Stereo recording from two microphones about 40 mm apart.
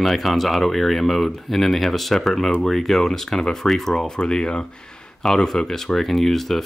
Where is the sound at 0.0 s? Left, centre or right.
Centre.